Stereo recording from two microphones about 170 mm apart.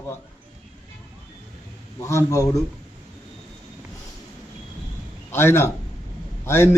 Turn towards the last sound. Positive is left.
turn(degrees=15)  # may be behind; listen again after turning